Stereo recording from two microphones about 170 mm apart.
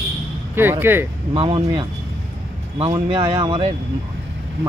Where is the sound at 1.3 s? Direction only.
35° right (ahead or behind).